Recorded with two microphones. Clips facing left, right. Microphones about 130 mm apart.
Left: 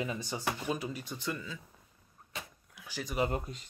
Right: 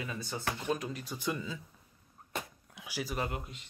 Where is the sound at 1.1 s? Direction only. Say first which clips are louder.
Right 2 dB; 15° right (ahead or behind).